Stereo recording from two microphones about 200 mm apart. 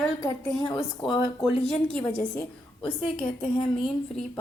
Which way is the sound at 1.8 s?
5° left (ahead or behind).